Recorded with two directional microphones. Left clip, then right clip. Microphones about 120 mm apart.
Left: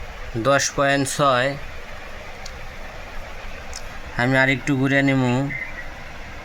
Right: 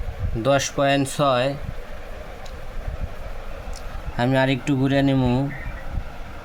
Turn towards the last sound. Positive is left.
turn(degrees=-5)  # may be behind; listen again after turning